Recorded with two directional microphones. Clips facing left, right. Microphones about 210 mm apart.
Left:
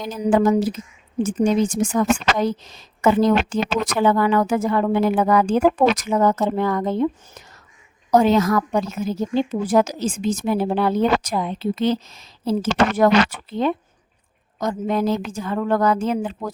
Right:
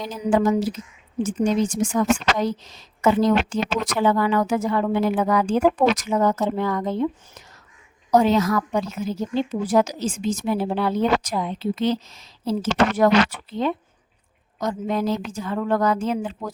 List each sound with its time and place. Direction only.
0.3 s a woman's voice: 50° left (ahead or behind)
8.1 s a woman's voice: 50° left (ahead or behind)